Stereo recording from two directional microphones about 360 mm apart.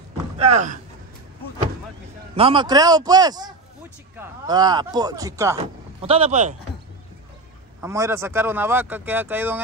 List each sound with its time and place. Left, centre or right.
0.4 s speech: centre
2.3 s speech: centre
7.8 s speech: centre